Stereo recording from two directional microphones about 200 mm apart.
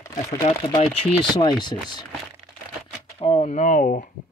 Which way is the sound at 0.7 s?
30° left (ahead or behind).